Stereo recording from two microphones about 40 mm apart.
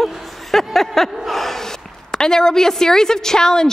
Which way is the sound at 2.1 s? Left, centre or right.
Centre.